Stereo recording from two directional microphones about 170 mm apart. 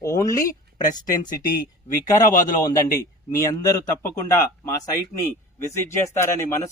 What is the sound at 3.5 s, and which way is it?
Speech, 20° left (ahead or behind).